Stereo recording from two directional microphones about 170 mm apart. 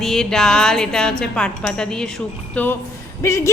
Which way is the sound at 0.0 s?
5° left (ahead or behind).